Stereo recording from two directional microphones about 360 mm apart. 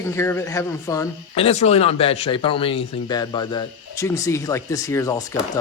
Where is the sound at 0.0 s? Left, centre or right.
Centre.